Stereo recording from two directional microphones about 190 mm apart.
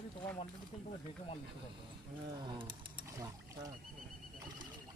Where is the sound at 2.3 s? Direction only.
25° right (ahead or behind).